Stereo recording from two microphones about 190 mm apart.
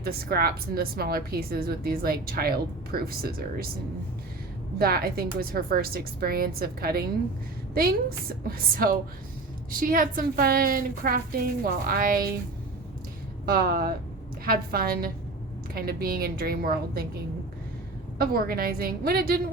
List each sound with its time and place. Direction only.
0.0 s a woman's voice: 55° right (ahead or behind)
4.8 s a woman's voice: 50° right (ahead or behind)
13.4 s a woman's voice: 55° right (ahead or behind)
18.2 s a woman's voice: 55° right (ahead or behind)